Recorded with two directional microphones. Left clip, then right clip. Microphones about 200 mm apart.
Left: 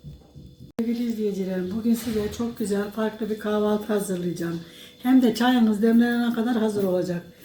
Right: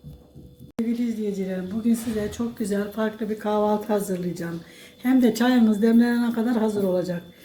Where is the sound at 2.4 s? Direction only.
10° right (ahead or behind).